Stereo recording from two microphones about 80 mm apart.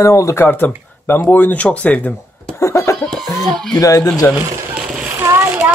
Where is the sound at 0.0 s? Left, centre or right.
Left.